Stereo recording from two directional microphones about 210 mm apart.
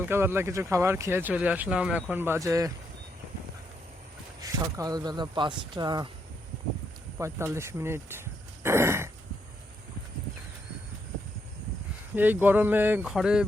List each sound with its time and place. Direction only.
0.0 s speech: 10° right (ahead or behind)
4.4 s speech: 15° right (ahead or behind)
7.2 s speech: 15° right (ahead or behind)
8.6 s throat clearing: 10° right (ahead or behind)
12.1 s speech: 10° right (ahead or behind)